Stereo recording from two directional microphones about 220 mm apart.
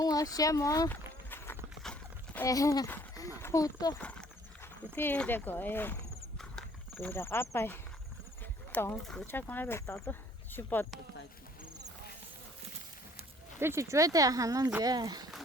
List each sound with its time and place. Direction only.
0.0 s horse: 15° left (ahead or behind)
4.0 s speech: 5° left (ahead or behind)
6.4 s a sound: 5° left (ahead or behind)
8.7 s speech: 5° left (ahead or behind)
13.6 s speech: 10° right (ahead or behind)